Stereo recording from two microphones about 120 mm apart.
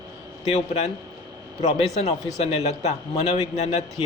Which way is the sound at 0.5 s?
60° left (ahead or behind).